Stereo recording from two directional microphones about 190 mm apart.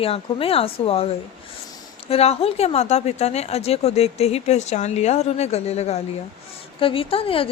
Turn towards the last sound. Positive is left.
turn(degrees=30)  # may be behind; listen again after turning